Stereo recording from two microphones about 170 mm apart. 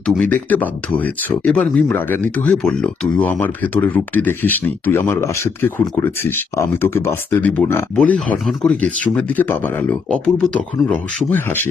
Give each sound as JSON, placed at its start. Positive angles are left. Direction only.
{"t": 0.0, "sound": "speech", "side_deg": 10}